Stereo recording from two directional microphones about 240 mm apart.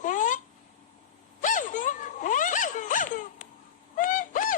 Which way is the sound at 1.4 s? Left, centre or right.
Left.